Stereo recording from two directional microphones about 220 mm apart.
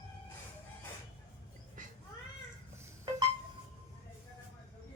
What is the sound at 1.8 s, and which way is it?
Cat, 35° right (ahead or behind).